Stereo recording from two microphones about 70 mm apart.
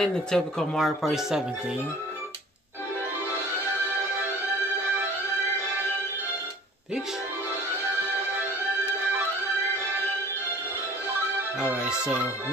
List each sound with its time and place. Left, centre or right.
0.0 s speech: centre
11.6 s speech: centre